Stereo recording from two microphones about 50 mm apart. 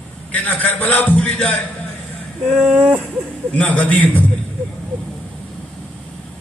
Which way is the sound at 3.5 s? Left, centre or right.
Left.